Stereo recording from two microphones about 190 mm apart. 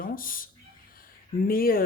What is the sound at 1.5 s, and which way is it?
Speech, 50° left (ahead or behind).